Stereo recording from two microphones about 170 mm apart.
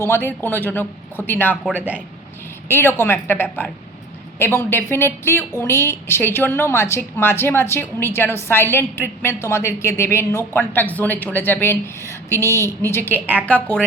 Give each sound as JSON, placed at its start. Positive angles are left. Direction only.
{"t": 0.0, "sound": "a woman's voice", "side_deg": 15}
{"t": 1.6, "sound": "speech", "side_deg": -10}
{"t": 2.6, "sound": "a woman's voice", "side_deg": 15}
{"t": 13.1, "sound": "speech", "side_deg": -10}
{"t": 13.4, "sound": "a woman's voice", "side_deg": 10}